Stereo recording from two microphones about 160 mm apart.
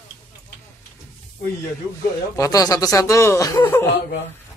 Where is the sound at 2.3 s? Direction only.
20° left (ahead or behind).